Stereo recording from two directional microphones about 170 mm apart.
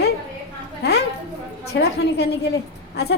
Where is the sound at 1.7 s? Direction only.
90° left.